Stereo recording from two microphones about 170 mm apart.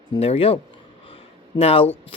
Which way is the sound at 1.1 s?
35° left (ahead or behind).